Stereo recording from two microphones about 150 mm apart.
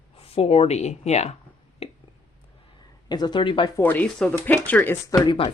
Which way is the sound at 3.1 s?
30° left (ahead or behind).